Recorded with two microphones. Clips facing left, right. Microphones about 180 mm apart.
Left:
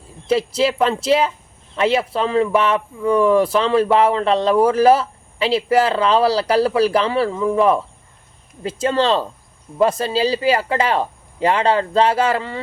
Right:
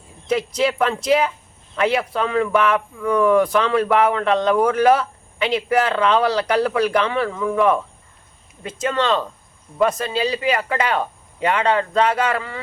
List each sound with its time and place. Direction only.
0.3 s speech: 30° left (ahead or behind)